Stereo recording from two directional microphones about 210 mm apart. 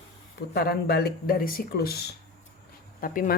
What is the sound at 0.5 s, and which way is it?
Speech, 50° left (ahead or behind).